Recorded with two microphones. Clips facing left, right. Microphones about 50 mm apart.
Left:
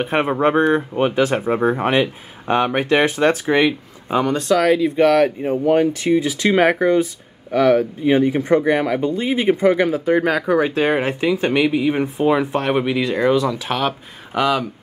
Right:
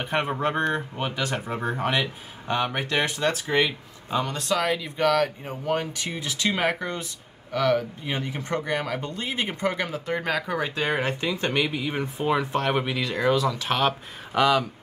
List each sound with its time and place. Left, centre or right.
0.0 s speech: left
4.5 s speech: centre
7.5 s speech: centre